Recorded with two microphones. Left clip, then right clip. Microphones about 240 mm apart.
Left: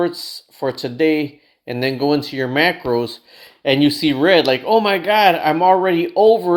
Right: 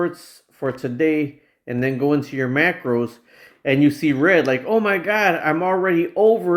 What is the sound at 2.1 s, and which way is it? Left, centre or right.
Speech, centre.